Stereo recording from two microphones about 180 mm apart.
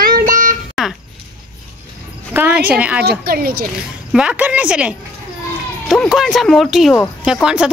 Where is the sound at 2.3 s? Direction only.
10° right (ahead or behind).